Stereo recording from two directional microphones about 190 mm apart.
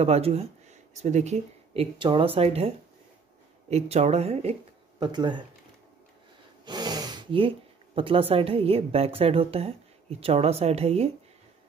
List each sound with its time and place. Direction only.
0.0 s speech: 35° right (ahead or behind)
3.7 s speech: 35° right (ahead or behind)
4.9 s speech: 25° right (ahead or behind)
6.6 s speech: 20° right (ahead or behind)